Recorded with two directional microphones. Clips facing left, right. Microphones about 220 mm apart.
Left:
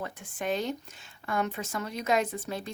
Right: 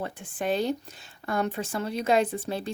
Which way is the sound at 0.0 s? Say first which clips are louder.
Right 3 dB; 30° right (ahead or behind).